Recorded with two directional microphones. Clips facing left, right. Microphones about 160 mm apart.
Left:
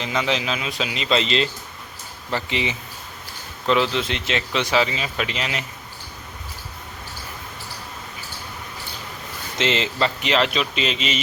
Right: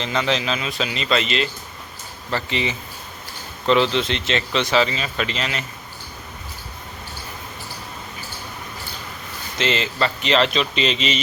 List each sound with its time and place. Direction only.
0.0 s speech: 10° left (ahead or behind)
1.2 s speech: 30° left (ahead or behind)
2.3 s speech: 15° left (ahead or behind)
9.6 s speech: 20° left (ahead or behind)